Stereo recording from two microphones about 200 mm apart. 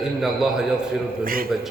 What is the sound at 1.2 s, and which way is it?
Speech, 45° right (ahead or behind).